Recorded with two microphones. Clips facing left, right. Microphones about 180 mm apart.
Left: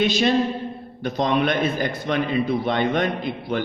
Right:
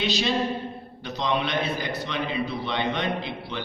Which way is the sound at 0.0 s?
50° left (ahead or behind).